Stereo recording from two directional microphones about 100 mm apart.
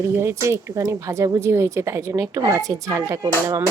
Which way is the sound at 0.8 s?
30° right (ahead or behind).